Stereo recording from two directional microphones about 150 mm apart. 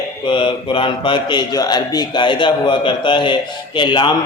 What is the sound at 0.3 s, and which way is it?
A man's voice, 35° left (ahead or behind).